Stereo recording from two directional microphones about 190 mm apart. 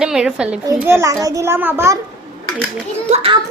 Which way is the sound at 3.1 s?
30° right (ahead or behind).